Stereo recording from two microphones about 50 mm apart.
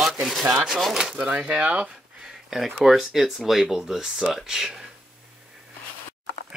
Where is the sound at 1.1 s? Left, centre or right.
Centre.